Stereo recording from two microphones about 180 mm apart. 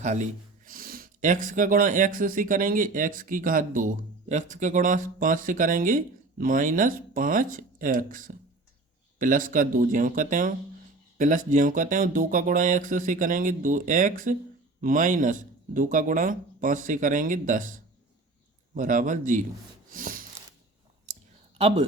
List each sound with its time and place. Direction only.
0.0 s speech: 40° right (ahead or behind)
19.9 s snort: 50° right (ahead or behind)